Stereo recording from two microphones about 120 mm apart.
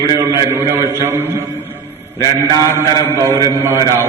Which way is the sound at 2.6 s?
25° right (ahead or behind).